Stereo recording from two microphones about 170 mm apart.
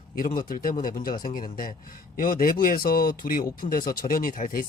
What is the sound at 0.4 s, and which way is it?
Speech, 55° left (ahead or behind).